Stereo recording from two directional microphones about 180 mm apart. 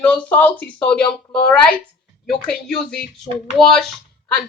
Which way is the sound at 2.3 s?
5° left (ahead or behind).